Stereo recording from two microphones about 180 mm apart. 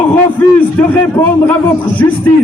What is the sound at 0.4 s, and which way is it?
A man's voice, 10° left (ahead or behind).